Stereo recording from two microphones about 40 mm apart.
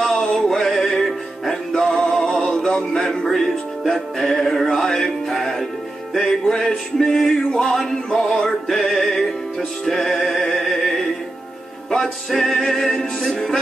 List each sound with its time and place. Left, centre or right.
0.0 s music: centre
1.7 s male singing: centre
2.7 s music: left
3.3 s music: centre
12.3 s music: centre